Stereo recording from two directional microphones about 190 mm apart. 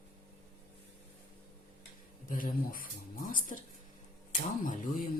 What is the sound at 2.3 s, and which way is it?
Speech, 45° left (ahead or behind).